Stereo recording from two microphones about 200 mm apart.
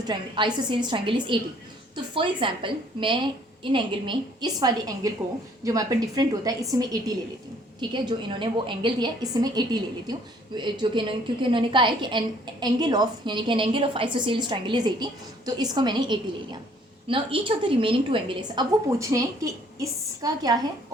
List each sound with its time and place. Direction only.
0.1 s a woman's voice: 25° right (ahead or behind)